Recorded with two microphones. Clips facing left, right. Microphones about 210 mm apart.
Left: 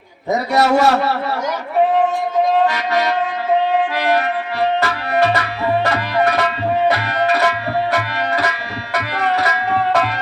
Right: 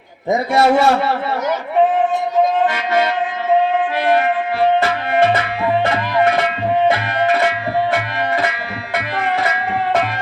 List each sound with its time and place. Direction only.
0.3 s a man's voice: 40° left (ahead or behind)
6.8 s tabla: 40° left (ahead or behind)
9.0 s music: 40° left (ahead or behind)